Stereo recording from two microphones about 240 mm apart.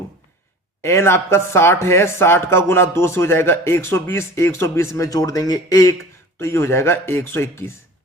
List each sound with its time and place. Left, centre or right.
0.8 s speech: centre